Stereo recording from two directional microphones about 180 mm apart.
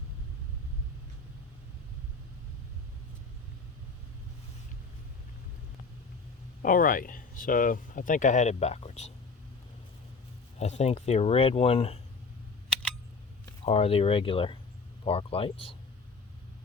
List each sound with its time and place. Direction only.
6.6 s speech: 50° left (ahead or behind)
10.6 s speech: 35° left (ahead or behind)
13.7 s speech: 35° left (ahead or behind)